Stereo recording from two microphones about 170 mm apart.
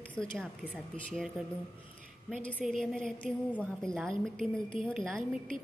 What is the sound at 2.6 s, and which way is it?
A woman's voice, centre (ahead or behind).